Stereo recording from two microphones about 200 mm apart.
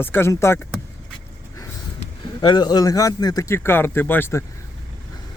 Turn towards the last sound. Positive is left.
turn(degrees=10)  # may be behind; listen again after turning